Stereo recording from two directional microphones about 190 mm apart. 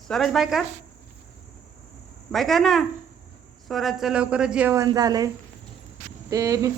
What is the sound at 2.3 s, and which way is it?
Speech, centre (ahead or behind).